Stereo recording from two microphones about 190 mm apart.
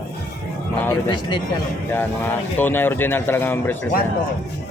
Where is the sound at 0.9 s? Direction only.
25° left (ahead or behind).